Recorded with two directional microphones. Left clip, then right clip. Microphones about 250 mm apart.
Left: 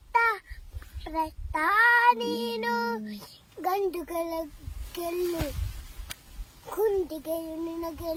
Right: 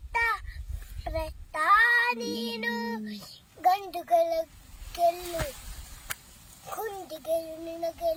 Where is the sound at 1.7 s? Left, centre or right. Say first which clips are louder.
Left 5 dB; centre.